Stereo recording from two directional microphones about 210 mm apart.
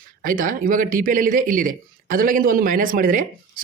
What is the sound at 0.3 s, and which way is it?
Speech, 40° right (ahead or behind).